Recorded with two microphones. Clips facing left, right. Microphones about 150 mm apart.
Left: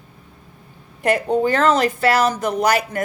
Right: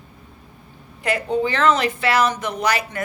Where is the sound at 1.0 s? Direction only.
50° left (ahead or behind).